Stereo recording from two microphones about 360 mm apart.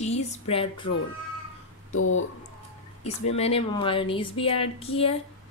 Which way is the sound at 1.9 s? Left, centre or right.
Left.